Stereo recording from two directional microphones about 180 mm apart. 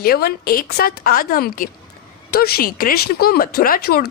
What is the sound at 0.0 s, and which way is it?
Speech, 60° left (ahead or behind).